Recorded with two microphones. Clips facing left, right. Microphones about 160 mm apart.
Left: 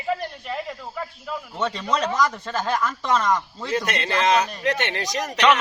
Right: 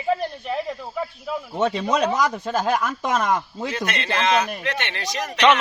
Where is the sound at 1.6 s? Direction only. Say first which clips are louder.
Right 3 dB; 10° right (ahead or behind).